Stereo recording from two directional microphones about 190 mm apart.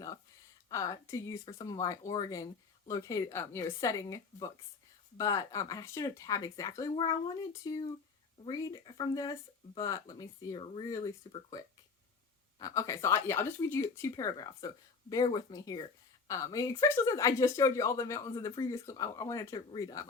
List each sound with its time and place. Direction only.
0.7 s speech: 15° left (ahead or behind)